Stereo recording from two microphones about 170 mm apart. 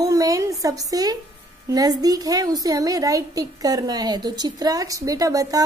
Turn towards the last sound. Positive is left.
turn(degrees=-20)  # may be behind; listen again after turning